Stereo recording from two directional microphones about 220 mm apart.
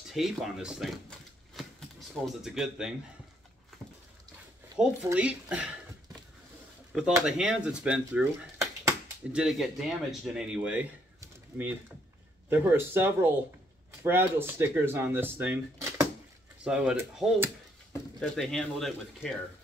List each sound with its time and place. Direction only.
0.1 s speech: centre (ahead or behind)
1.5 s typewriter: centre (ahead or behind)
4.7 s speech: 5° right (ahead or behind)
6.9 s speech: centre (ahead or behind)